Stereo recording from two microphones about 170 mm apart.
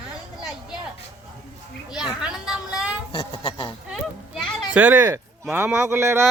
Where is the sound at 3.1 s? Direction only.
35° left (ahead or behind).